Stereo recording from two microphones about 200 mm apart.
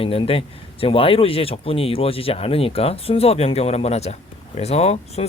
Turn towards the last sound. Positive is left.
turn(degrees=30)  # may be behind; listen again after turning